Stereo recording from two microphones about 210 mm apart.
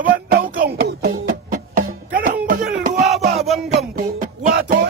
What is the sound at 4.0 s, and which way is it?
Music, 45° right (ahead or behind).